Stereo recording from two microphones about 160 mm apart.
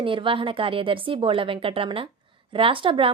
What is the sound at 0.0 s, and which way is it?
A woman's voice, 30° right (ahead or behind).